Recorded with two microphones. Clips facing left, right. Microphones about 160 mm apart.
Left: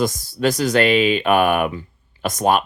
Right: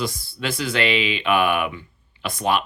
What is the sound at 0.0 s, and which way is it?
Speech, 45° left (ahead or behind).